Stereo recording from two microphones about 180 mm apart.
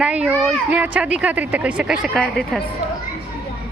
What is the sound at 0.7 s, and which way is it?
A woman's voice, 10° right (ahead or behind).